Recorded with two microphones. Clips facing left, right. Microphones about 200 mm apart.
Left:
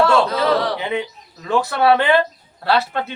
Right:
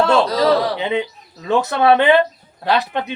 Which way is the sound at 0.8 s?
20° right (ahead or behind).